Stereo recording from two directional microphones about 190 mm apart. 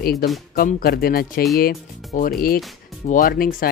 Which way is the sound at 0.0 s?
50° left (ahead or behind).